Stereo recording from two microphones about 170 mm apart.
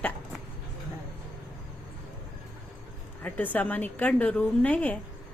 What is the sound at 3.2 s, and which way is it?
A woman's voice, 10° left (ahead or behind).